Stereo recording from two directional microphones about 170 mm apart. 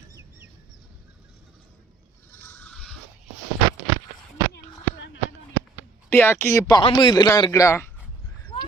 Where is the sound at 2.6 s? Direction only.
5° left (ahead or behind).